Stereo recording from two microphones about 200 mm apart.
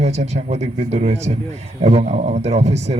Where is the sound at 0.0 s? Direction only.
35° right (ahead or behind).